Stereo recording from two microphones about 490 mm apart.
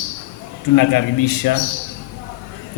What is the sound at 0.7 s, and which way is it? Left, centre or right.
Speech, left.